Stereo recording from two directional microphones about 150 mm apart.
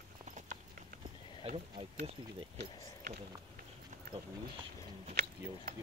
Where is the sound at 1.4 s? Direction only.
45° right (ahead or behind).